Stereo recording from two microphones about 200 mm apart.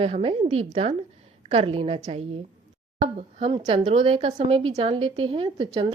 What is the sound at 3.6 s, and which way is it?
A woman's voice, 20° right (ahead or behind).